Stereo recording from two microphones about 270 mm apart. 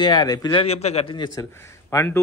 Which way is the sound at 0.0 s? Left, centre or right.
Centre.